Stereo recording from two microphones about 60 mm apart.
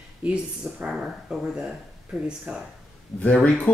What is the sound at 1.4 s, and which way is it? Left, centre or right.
Speech, centre.